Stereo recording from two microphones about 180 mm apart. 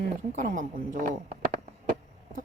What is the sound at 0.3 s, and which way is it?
Speech, 45° right (ahead or behind).